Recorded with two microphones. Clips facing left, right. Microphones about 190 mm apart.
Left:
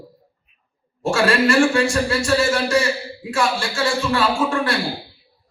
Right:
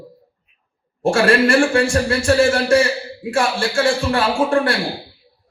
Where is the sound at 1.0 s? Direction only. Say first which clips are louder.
Right 3 dB; 55° right (ahead or behind).